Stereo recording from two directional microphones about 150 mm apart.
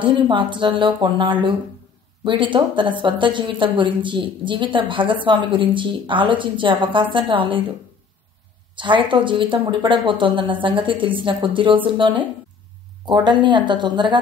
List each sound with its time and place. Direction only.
0.0 s a woman's voice: 35° right (ahead or behind)
8.7 s a woman's voice: 30° right (ahead or behind)